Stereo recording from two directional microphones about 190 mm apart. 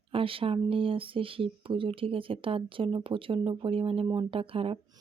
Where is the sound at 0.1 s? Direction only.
30° right (ahead or behind).